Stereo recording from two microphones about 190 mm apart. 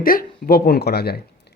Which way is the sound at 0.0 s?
50° left (ahead or behind).